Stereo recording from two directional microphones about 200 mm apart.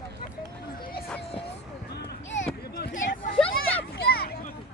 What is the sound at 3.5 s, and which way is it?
Children playing, 50° left (ahead or behind).